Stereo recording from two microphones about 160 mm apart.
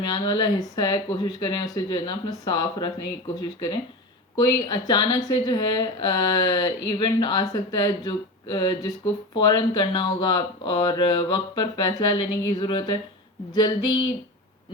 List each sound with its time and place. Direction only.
0.0 s speech: 25° left (ahead or behind)
4.4 s speech: 25° left (ahead or behind)